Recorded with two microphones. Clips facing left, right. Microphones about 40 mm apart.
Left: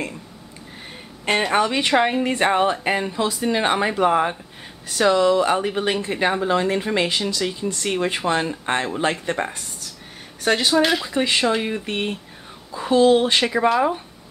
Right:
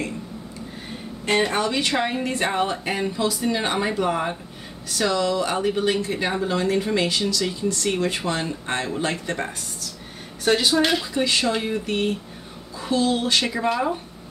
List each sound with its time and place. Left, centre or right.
1.5 s speech: left
10.4 s speech: centre
11.1 s speech: left